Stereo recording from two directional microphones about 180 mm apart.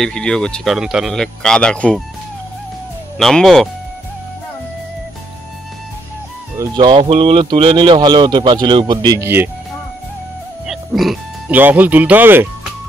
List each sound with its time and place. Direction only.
0.0 s speech: 5° left (ahead or behind)
3.2 s speech: centre (ahead or behind)
6.6 s speech: 25° right (ahead or behind)
10.7 s speech: centre (ahead or behind)